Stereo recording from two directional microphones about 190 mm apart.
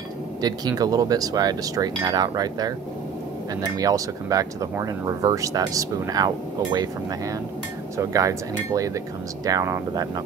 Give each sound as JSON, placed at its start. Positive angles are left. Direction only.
{"t": 0.4, "sound": "speech", "side_deg": -20}